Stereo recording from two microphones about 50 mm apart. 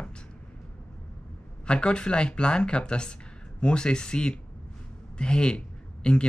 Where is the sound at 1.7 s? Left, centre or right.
Centre.